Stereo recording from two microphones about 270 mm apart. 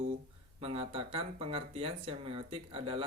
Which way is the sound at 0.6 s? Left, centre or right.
Right.